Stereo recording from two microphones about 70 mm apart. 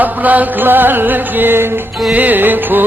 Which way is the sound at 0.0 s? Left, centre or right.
Right.